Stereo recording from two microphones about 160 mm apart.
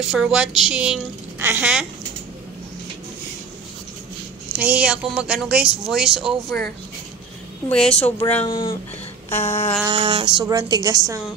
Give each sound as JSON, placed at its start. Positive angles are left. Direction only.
{"t": 0.0, "sound": "speech", "side_deg": -5}
{"t": 4.6, "sound": "speech", "side_deg": -10}
{"t": 7.7, "sound": "speech", "side_deg": 5}
{"t": 8.5, "sound": "speech", "side_deg": 25}
{"t": 9.3, "sound": "a sound", "side_deg": 40}
{"t": 9.8, "sound": "a sound", "side_deg": -30}
{"t": 10.4, "sound": "a woman's voice", "side_deg": -25}